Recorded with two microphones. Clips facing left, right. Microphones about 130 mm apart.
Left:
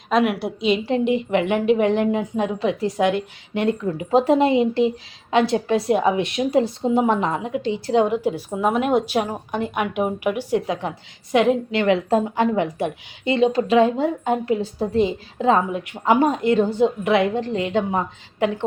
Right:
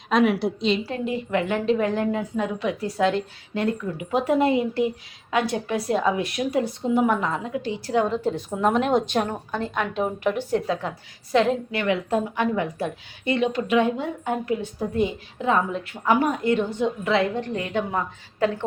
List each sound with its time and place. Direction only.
0.1 s a woman's voice: centre (ahead or behind)
0.7 s a woman's voice: 20° left (ahead or behind)
3.9 s a woman's voice: 30° left (ahead or behind)
11.8 s a woman's voice: 30° left (ahead or behind)
15.7 s a woman's voice: 15° left (ahead or behind)
16.0 s a woman's voice: 25° left (ahead or behind)